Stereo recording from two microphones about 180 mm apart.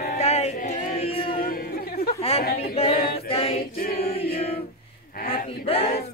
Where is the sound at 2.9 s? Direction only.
60° left (ahead or behind).